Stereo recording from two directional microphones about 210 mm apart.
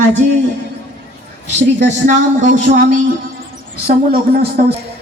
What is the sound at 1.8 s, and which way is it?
Speech, 35° right (ahead or behind).